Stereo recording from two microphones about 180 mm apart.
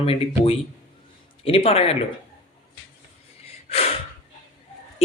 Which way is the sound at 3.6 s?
35° left (ahead or behind).